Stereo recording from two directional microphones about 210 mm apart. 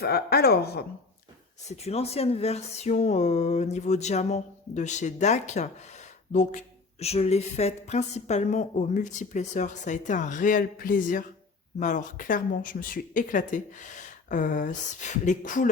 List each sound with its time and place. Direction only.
0.0 s a woman's voice: 50° left (ahead or behind)
1.6 s speech: 30° left (ahead or behind)